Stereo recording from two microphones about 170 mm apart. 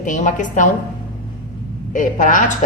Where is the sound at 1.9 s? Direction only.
50° left (ahead or behind).